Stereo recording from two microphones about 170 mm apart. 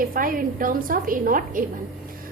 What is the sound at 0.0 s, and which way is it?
A woman's voice, 55° right (ahead or behind).